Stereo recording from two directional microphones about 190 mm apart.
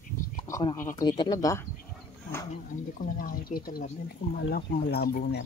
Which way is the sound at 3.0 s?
50° left (ahead or behind).